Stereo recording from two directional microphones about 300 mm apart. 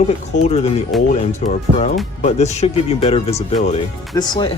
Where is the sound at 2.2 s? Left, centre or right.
Left.